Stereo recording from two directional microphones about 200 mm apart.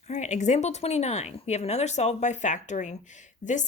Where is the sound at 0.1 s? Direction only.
35° left (ahead or behind).